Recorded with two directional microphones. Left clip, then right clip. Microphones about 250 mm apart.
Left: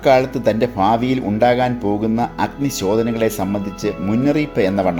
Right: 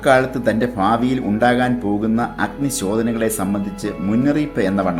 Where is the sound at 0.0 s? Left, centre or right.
Left.